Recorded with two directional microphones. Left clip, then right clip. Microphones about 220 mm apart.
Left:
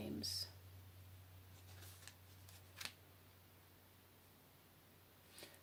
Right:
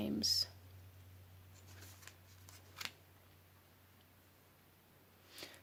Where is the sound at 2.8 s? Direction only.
15° right (ahead or behind).